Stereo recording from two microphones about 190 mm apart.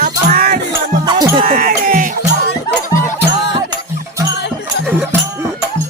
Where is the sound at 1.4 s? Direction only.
50° right (ahead or behind).